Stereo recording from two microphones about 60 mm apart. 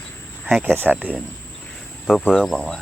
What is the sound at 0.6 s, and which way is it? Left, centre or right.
Speech, right.